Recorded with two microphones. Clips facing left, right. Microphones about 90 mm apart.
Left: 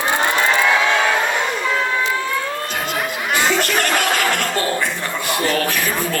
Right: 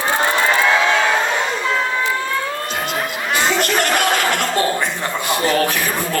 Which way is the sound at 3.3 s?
20° right (ahead or behind).